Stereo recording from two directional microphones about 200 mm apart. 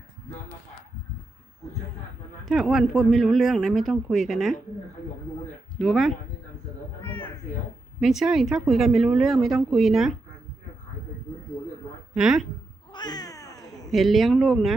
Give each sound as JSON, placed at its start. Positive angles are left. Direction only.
{"t": 2.5, "sound": "a woman's voice", "side_deg": 0}
{"t": 5.8, "sound": "a woman's voice", "side_deg": 0}
{"t": 7.0, "sound": "cat", "side_deg": 10}
{"t": 8.0, "sound": "a woman's voice", "side_deg": 0}
{"t": 12.1, "sound": "a woman's voice", "side_deg": 0}
{"t": 12.9, "sound": "cat", "side_deg": 20}
{"t": 13.9, "sound": "a woman's voice", "side_deg": 0}